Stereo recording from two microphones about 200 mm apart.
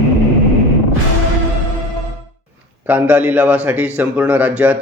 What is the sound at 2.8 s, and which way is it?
Speech, 10° right (ahead or behind).